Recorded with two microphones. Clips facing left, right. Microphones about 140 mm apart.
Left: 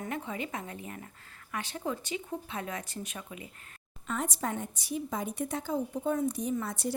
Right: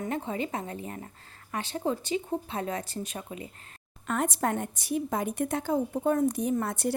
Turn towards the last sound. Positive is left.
turn(degrees=-60)  # may be behind; listen again after turning